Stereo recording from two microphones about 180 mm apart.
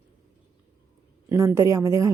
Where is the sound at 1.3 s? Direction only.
15° right (ahead or behind).